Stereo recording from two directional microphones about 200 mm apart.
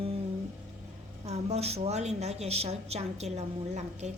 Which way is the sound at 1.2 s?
30° right (ahead or behind).